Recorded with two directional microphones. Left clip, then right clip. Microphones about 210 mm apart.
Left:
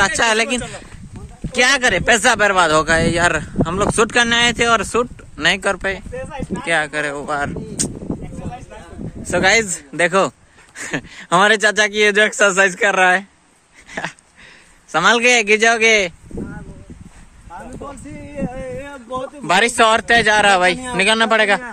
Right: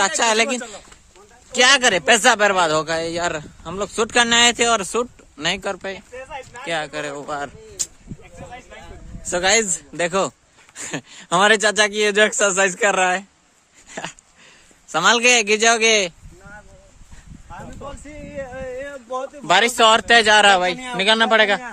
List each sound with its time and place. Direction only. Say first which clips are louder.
0.0 s speech: left 2 dB; 10° right (ahead or behind)
1.5 s speech: even; 15° right (ahead or behind); by 4.1 s centre (ahead or behind)
4.1 s speech: left 1 dB; 15° right (ahead or behind)
6.1 s speech: left 6 dB; 45° left (ahead or behind)
6.6 s speech: left 7 dB; 10° right (ahead or behind)
9.3 s speech: left 3 dB; 15° right (ahead or behind)
13.9 s dog: left 5 dB; 10° right (ahead or behind)
14.9 s speech: left 2 dB; 15° right (ahead or behind)
18.3 s a sound: left 2 dB; 40° left (ahead or behind)
19.4 s speech: left 1 dB; 10° right (ahead or behind)
20.5 s speech: left 4 dB; 5° right (ahead or behind)